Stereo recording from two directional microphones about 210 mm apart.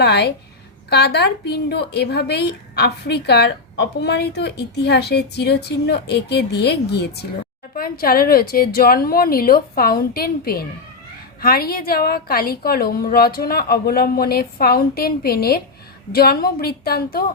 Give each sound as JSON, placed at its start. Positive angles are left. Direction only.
{"t": 0.0, "sound": "a woman's voice", "side_deg": 50}